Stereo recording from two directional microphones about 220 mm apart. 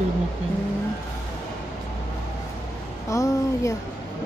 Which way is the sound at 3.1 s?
15° left (ahead or behind).